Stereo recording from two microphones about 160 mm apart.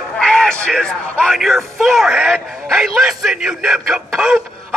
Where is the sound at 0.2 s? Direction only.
5° left (ahead or behind).